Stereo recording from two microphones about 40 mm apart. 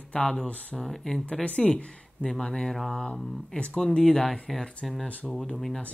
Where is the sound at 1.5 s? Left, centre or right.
Left.